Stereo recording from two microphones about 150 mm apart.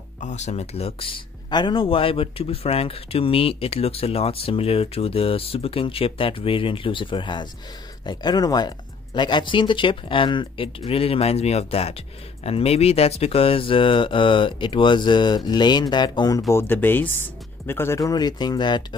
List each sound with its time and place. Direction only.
0.2 s speech: 50° left (ahead or behind); by 18.9 s 30° left (ahead or behind)